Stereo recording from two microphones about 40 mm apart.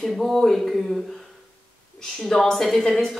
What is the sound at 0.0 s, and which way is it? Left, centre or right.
Speech, centre.